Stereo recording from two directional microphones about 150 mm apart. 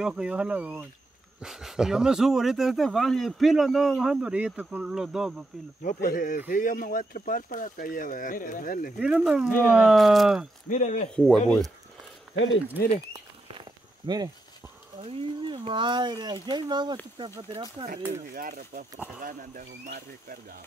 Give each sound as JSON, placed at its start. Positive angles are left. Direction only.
{"t": 0.0, "sound": "speech", "side_deg": -5}
{"t": 5.8, "sound": "speech", "side_deg": 70}
{"t": 9.0, "sound": "speech", "side_deg": -5}
{"t": 10.7, "sound": "speech", "side_deg": 55}
{"t": 11.1, "sound": "speech", "side_deg": 5}
{"t": 13.6, "sound": "a sound", "side_deg": -30}
{"t": 15.0, "sound": "speech", "side_deg": -40}
{"t": 18.3, "sound": "speech", "side_deg": -65}